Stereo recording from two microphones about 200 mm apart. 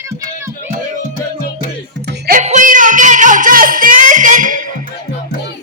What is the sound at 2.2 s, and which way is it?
Music, 40° right (ahead or behind).